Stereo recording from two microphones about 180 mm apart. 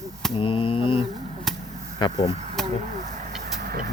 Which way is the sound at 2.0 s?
30° left (ahead or behind).